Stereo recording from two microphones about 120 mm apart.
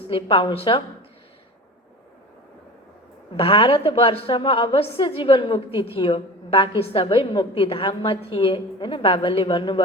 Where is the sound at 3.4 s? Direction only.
50° left (ahead or behind).